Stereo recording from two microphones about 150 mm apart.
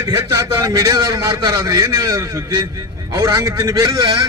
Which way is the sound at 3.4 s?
20° right (ahead or behind).